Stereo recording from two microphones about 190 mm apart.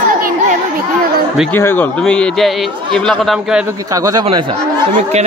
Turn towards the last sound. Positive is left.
turn(degrees=-20)  # may be behind; listen again after turning